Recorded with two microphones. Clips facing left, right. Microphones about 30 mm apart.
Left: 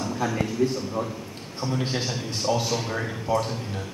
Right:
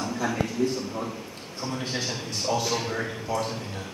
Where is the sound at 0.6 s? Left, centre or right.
Centre.